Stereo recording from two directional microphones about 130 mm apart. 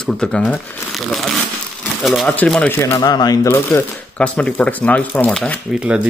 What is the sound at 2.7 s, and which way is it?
Speech, 15° left (ahead or behind).